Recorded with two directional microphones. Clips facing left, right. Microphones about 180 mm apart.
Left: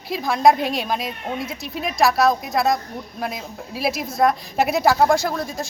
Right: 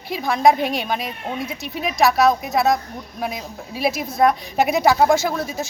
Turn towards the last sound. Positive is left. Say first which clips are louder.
# right 1 dB
turn(degrees=-5)  # may be behind; listen again after turning